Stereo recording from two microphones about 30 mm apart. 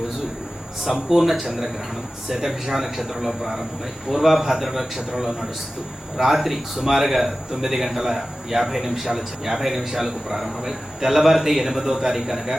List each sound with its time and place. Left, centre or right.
1.1 s a man's voice: centre